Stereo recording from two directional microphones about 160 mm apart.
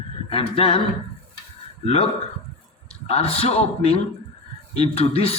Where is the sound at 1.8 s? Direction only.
40° left (ahead or behind).